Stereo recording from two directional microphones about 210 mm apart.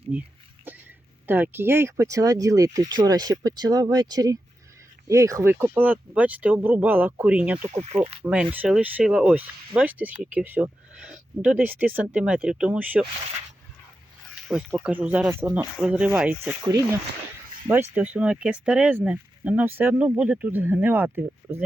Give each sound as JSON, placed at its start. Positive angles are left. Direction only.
{"t": 0.1, "sound": "a sound", "side_deg": -10}
{"t": 1.3, "sound": "speech", "side_deg": -10}
{"t": 14.4, "sound": "speech", "side_deg": -5}
{"t": 17.7, "sound": "speech", "side_deg": -10}